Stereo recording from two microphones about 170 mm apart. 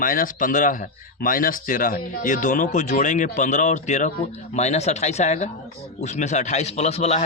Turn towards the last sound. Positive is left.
turn(degrees=40)  # may be behind; listen again after turning